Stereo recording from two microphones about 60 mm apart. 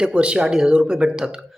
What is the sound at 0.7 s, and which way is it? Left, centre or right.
Speech, centre.